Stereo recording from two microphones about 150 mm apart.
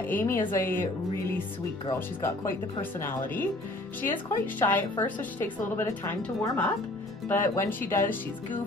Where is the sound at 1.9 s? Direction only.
20° left (ahead or behind).